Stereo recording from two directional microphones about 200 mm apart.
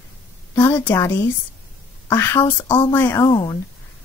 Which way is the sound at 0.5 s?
15° left (ahead or behind).